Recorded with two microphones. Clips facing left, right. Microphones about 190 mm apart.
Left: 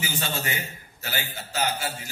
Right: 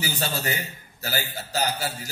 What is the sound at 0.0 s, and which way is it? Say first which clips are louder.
A man's voice: right 2 dB; 35° right (ahead or behind).